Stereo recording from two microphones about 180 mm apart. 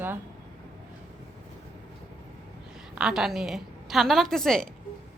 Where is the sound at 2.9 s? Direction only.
5° right (ahead or behind).